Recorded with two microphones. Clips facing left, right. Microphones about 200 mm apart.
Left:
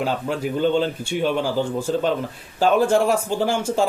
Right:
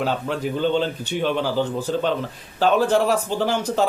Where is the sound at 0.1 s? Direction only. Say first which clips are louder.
Even; 10° left (ahead or behind).